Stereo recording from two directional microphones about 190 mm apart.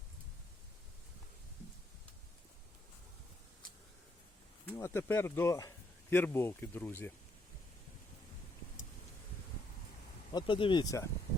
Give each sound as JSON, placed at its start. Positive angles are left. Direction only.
{"t": 4.6, "sound": "speech", "side_deg": 10}
{"t": 10.3, "sound": "speech", "side_deg": 25}